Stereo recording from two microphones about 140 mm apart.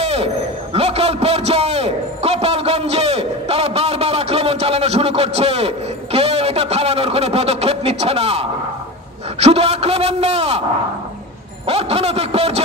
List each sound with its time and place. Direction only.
0.0 s a sound: 45° right (ahead or behind)
9.4 s a man's voice: 45° right (ahead or behind)
11.6 s a man's voice: 45° right (ahead or behind)